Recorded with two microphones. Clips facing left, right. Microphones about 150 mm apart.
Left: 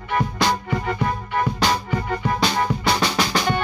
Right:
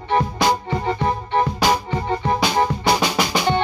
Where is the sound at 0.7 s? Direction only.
30° right (ahead or behind).